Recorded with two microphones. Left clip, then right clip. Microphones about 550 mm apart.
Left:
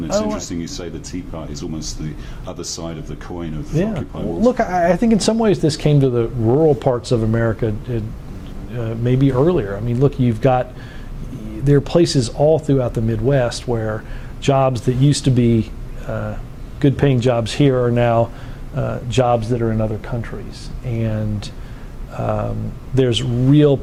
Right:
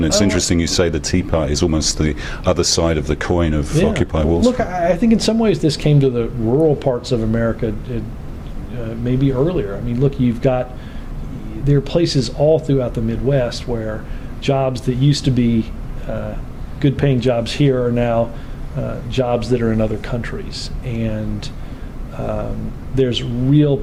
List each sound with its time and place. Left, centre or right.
0.0 s speech: right
4.5 s speech: left
19.4 s speech: centre